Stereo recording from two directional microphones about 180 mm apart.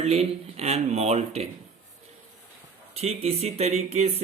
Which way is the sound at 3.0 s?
35° right (ahead or behind).